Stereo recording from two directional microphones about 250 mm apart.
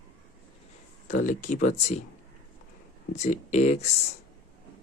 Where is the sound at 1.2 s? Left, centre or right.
Left.